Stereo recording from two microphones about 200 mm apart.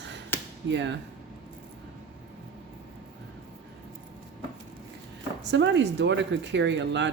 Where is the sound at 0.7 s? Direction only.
65° right (ahead or behind).